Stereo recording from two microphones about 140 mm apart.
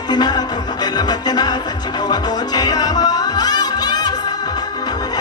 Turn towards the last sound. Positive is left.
turn(degrees=30)  # may be behind; listen again after turning